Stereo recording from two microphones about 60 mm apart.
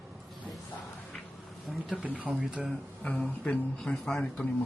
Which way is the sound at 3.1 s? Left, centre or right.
Centre.